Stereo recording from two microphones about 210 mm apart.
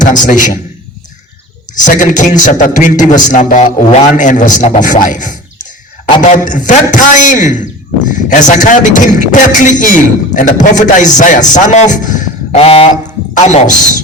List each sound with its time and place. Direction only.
0.3 s a man's voice: 40° left (ahead or behind)
1.7 s a man's voice: 40° left (ahead or behind)